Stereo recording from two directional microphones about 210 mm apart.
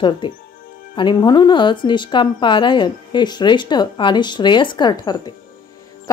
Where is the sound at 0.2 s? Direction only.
25° left (ahead or behind).